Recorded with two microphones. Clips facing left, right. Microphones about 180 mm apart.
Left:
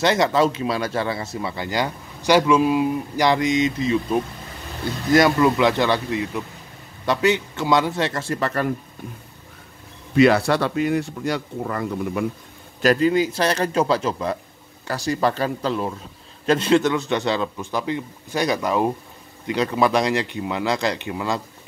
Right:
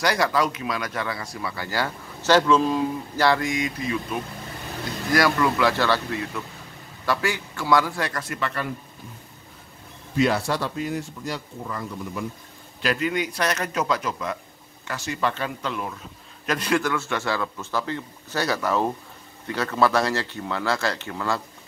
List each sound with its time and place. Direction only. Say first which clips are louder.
0.0 s speech: left 4 dB; 25° left (ahead or behind)
8.4 s speech: left 6 dB; 40° left (ahead or behind)
10.1 s speech: left 6 dB; 70° left (ahead or behind)
12.8 s a man's voice: left 7 dB; 35° left (ahead or behind); by 21.4 s 15° left (ahead or behind)